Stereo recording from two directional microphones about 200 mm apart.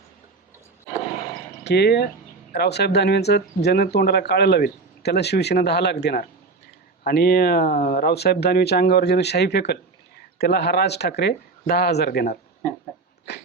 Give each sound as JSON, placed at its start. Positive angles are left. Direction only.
{"t": 1.6, "sound": "speech", "side_deg": 55}